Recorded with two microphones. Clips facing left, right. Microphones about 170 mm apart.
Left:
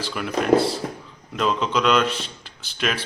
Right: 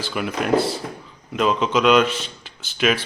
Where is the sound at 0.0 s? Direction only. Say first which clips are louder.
Even; 5° right (ahead or behind).